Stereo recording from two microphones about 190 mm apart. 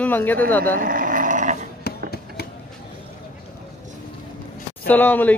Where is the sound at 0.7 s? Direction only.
45° right (ahead or behind).